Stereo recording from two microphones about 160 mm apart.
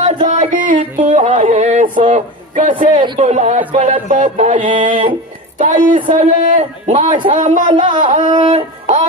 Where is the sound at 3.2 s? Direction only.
45° right (ahead or behind).